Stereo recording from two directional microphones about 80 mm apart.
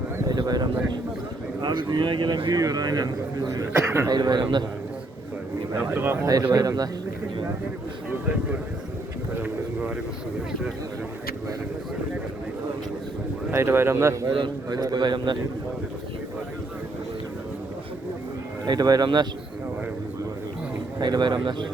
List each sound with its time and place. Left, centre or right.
0.3 s a sound: right
1.6 s speech: right
2.6 s a man's voice: right
3.7 s speech: right
4.1 s a man's voice: right
5.7 s a man's voice: right
6.5 s a man's voice: right
13.5 s speech: right
14.7 s a man's voice: right
14.9 s speech: right
18.6 s a man's voice: right
21.0 s speech: right